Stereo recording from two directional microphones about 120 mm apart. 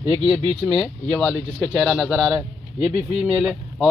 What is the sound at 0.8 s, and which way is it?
Speech, centre (ahead or behind).